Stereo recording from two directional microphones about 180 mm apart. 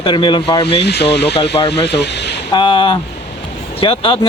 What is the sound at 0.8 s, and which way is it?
Speech, 65° left (ahead or behind).